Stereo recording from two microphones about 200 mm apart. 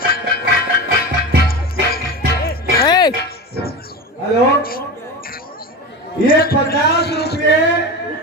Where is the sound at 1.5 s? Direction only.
50° left (ahead or behind).